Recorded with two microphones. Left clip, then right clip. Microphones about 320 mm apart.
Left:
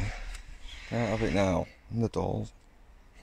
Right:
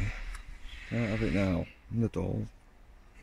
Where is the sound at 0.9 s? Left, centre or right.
Left.